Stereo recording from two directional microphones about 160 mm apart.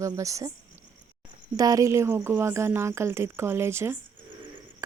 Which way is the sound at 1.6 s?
20° right (ahead or behind).